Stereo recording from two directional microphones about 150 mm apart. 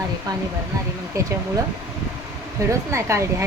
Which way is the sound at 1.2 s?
20° right (ahead or behind).